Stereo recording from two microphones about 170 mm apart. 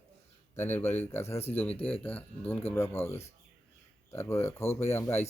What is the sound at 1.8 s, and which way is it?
Speech, 35° left (ahead or behind).